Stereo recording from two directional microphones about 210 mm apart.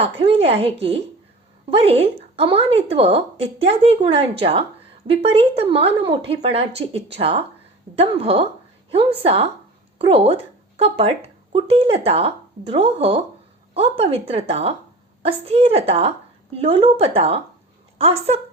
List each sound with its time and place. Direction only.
0.0 s a woman's voice: 25° right (ahead or behind)